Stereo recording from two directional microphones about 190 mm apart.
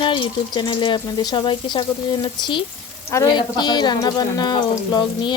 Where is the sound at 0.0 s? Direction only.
25° left (ahead or behind).